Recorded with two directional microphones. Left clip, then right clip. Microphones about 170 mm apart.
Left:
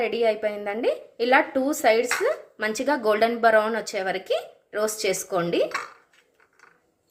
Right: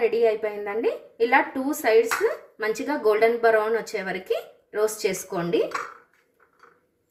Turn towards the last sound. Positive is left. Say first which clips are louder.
# left 1 dB
turn(degrees=30)  # may be behind; listen again after turning